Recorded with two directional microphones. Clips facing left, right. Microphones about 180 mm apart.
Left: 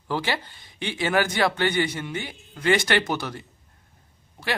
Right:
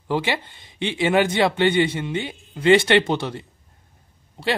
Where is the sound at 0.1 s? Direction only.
20° right (ahead or behind).